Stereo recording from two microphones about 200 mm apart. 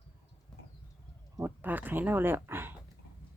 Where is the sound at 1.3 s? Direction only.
10° right (ahead or behind).